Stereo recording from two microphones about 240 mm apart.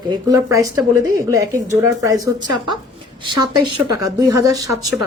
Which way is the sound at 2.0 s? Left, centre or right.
Centre.